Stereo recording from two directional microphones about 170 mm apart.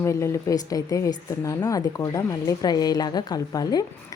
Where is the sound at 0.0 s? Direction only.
15° left (ahead or behind).